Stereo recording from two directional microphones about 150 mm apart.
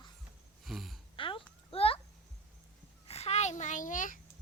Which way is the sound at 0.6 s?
Centre (ahead or behind).